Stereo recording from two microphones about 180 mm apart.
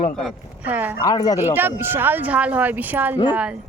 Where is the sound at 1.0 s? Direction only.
20° left (ahead or behind).